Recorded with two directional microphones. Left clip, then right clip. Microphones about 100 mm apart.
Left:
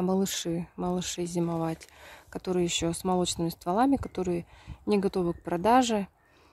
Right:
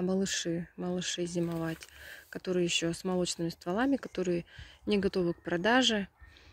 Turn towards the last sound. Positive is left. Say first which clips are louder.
# left 4 dB
turn(degrees=30)  # may be behind; listen again after turning